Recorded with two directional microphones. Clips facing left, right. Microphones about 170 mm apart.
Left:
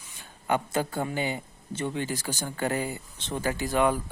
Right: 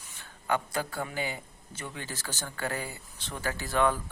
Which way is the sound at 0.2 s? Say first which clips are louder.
Left 3 dB; 20° left (ahead or behind).